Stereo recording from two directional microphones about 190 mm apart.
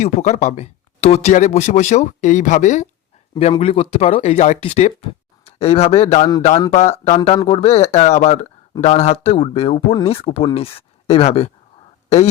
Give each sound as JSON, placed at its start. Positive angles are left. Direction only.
{"t": 0.0, "sound": "speech", "side_deg": 40}
{"t": 3.5, "sound": "speech", "side_deg": 30}